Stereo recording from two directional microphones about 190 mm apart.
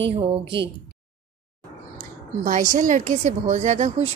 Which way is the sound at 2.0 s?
45° right (ahead or behind).